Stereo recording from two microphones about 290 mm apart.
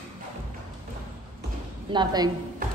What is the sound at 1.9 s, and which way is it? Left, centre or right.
Speech, centre.